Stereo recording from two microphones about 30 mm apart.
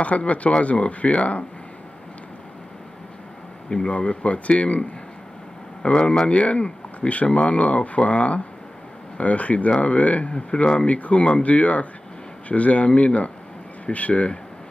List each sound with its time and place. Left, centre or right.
0.0 s speech: left
3.8 s speech: left
5.8 s speech: left
10.3 s speech: left
10.8 s speech: left